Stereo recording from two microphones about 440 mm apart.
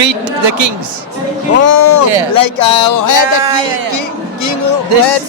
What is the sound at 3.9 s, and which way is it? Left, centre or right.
Music, left.